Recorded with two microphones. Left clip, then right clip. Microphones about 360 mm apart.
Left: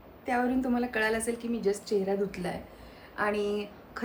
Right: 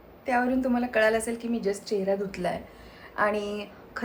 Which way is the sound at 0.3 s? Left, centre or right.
Centre.